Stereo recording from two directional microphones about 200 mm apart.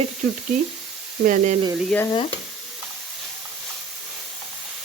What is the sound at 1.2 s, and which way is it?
Speech, 40° right (ahead or behind).